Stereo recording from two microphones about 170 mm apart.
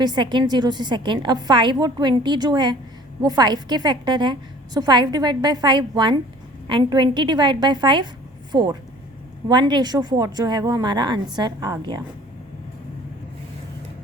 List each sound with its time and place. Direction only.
0.0 s a woman's voice: 25° right (ahead or behind)